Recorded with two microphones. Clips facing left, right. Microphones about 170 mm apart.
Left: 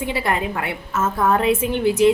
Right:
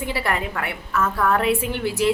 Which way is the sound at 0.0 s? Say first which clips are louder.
Left 3 dB; 20° left (ahead or behind).